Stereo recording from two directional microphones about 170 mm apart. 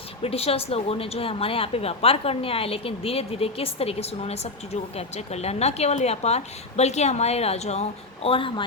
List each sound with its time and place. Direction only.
0.2 s a woman's voice: 35° left (ahead or behind)